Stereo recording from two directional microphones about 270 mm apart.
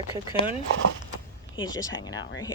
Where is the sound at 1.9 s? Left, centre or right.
Left.